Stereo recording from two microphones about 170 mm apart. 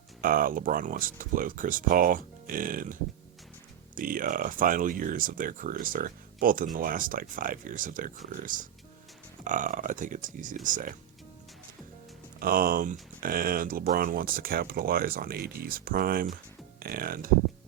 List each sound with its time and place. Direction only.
0.2 s speech: 55° right (ahead or behind)
12.4 s speech: 60° right (ahead or behind)